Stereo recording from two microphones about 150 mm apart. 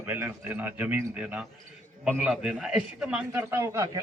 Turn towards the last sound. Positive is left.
turn(degrees=-20)  # may be behind; listen again after turning